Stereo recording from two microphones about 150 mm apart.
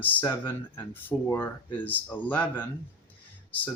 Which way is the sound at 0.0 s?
10° left (ahead or behind).